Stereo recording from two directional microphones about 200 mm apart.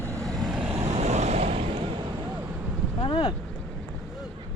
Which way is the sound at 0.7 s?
30° right (ahead or behind).